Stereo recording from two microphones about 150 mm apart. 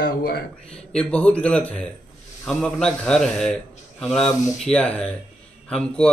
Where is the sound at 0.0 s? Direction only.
90° left.